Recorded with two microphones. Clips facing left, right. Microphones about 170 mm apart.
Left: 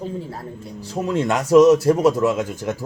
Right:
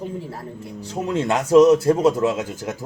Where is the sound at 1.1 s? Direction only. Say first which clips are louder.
Even; 25° right (ahead or behind).